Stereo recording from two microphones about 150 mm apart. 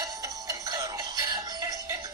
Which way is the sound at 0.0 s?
25° right (ahead or behind).